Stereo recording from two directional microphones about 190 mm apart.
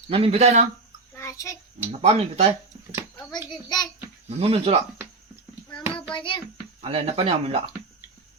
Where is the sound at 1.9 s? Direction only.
35° right (ahead or behind).